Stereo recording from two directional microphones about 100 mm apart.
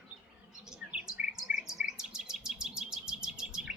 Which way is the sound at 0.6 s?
5° right (ahead or behind).